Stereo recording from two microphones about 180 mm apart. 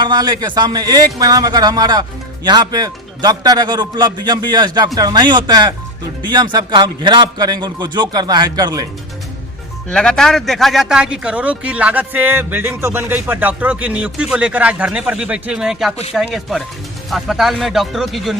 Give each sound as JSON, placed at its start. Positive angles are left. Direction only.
{"t": 0.0, "sound": "a man's voice", "side_deg": -25}
{"t": 9.9, "sound": "a man's voice", "side_deg": 5}